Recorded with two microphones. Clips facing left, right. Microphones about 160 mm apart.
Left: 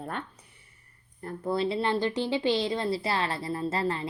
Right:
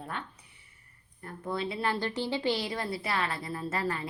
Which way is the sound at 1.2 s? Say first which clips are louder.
Left 6 dB; 35° left (ahead or behind).